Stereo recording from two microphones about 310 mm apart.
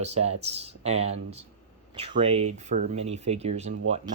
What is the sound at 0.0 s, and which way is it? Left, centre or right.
Speech, right.